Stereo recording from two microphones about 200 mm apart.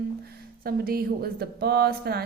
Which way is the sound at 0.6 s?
50° right (ahead or behind).